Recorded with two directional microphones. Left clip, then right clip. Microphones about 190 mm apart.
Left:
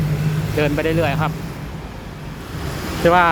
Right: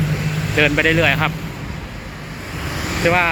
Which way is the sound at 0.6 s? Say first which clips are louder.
Right 4 dB; 5° left (ahead or behind).